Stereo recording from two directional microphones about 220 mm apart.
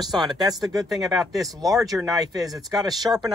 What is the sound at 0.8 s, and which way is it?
Speech, centre (ahead or behind).